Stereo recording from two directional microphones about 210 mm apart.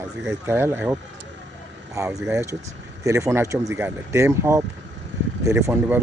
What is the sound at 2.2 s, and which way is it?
Speech, 15° right (ahead or behind).